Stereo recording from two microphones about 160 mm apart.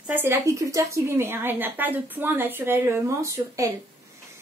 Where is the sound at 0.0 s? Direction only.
10° right (ahead or behind).